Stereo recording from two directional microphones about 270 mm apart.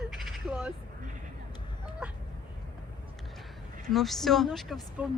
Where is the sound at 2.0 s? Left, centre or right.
Centre.